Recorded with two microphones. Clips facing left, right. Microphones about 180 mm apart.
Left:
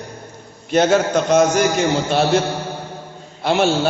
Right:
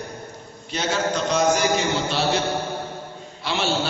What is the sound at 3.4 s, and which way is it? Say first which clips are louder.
Speech: left 8 dB; 50° left (ahead or behind).